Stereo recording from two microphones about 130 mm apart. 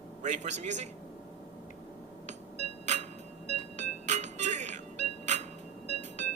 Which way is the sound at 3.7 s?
60° right (ahead or behind).